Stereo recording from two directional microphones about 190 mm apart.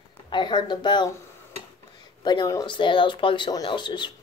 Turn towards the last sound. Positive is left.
turn(degrees=25)  # may be behind; listen again after turning